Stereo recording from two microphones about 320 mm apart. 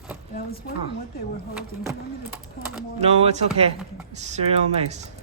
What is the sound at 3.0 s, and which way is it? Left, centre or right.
Speech, centre.